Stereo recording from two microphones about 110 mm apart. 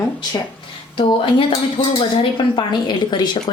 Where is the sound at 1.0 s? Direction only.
55° left (ahead or behind).